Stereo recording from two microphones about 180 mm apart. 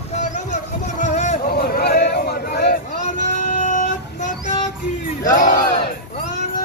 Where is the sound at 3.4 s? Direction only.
45° left (ahead or behind).